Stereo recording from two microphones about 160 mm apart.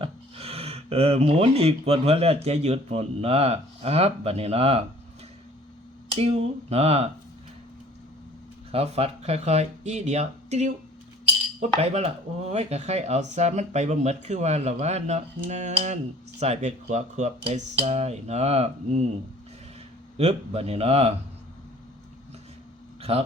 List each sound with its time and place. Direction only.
0.0 s speech: 40° right (ahead or behind)
6.1 s speech: 40° right (ahead or behind)
8.7 s speech: 40° right (ahead or behind)
11.8 s speech: 40° right (ahead or behind)
20.1 s speech: 40° right (ahead or behind)